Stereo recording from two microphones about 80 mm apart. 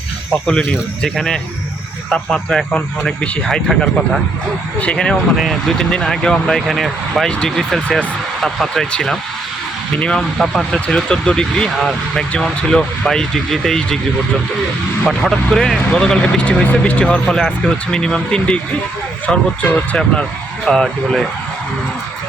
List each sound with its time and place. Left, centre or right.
0.4 s speech: centre
5.4 s speech: centre
15.0 s speech: centre
20.7 s speech: centre